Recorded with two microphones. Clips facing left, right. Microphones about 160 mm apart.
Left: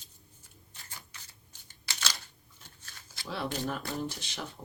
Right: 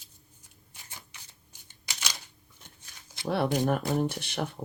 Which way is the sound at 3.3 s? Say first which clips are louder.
Right 8 dB; 60° right (ahead or behind).